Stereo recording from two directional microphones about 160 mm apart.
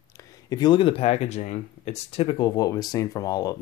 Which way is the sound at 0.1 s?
20° left (ahead or behind).